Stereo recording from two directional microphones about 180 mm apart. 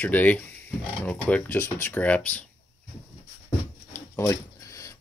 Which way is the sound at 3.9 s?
15° left (ahead or behind).